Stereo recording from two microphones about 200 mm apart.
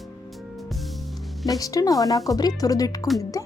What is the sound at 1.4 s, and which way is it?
Speech, 15° left (ahead or behind).